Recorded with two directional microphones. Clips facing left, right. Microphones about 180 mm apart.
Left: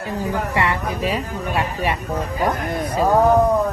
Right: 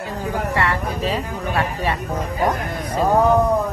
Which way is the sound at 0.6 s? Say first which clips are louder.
Left 1 dB; 15° left (ahead or behind).